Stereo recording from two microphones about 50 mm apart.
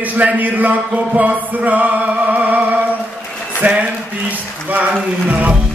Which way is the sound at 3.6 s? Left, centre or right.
Right.